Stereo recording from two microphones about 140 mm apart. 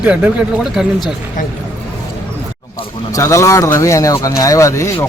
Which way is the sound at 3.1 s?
20° left (ahead or behind).